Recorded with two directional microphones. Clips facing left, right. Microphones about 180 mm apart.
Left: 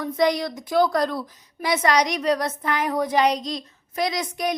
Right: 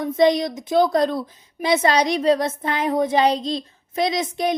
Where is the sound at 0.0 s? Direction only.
25° right (ahead or behind).